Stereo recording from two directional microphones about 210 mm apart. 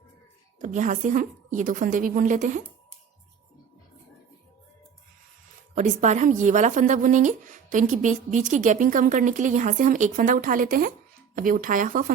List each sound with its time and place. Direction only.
0.6 s speech: 35° right (ahead or behind)
5.7 s speech: 35° right (ahead or behind)